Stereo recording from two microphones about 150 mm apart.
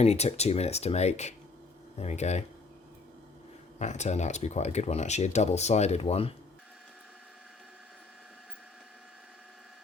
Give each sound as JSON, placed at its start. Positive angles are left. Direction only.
{"t": 0.0, "sound": "speech", "side_deg": 45}
{"t": 3.8, "sound": "speech", "side_deg": 50}